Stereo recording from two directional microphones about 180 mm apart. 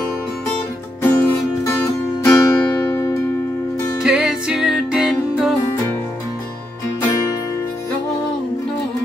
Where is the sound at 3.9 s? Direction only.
5° right (ahead or behind).